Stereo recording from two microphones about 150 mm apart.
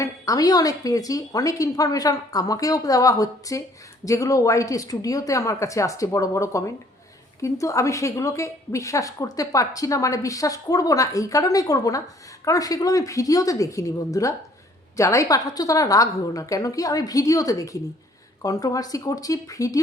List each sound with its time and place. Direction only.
0.0 s a woman's voice: 25° left (ahead or behind)